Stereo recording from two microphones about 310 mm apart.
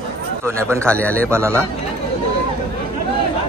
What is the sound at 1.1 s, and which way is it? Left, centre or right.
Speech, centre.